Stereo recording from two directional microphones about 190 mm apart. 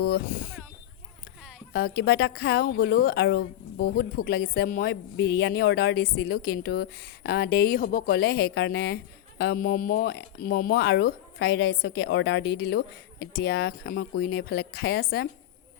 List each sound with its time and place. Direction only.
0.0 s speech: 55° left (ahead or behind)
1.7 s a man's voice: 60° left (ahead or behind)
10.1 s speech: 55° left (ahead or behind)